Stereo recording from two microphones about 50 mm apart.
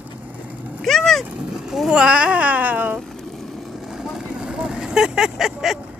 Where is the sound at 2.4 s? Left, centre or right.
Right.